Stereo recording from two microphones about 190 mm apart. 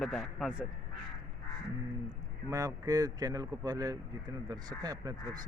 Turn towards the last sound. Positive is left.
turn(degrees=-20)  # may be behind; listen again after turning